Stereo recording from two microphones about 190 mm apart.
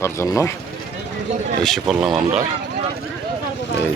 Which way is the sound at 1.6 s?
5° right (ahead or behind).